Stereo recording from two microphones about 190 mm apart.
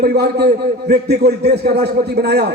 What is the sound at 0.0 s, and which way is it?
Speech, 55° right (ahead or behind).